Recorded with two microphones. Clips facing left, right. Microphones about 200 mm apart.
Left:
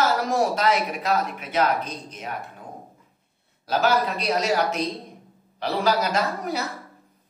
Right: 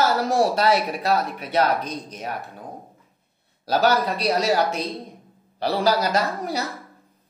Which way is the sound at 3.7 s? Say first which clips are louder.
Right 2 dB; 35° right (ahead or behind).